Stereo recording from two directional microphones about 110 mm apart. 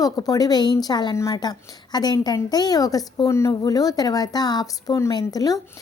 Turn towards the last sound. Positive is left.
turn(degrees=35)  # may be behind; listen again after turning